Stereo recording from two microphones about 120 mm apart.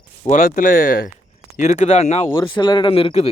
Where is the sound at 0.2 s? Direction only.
60° left (ahead or behind).